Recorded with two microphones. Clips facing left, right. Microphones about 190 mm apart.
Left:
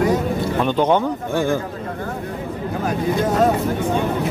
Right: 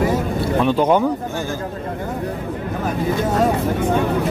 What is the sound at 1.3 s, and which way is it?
Speech, 55° left (ahead or behind).